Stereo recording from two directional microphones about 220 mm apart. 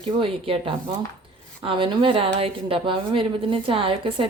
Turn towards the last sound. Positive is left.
turn(degrees=-25)  # may be behind; listen again after turning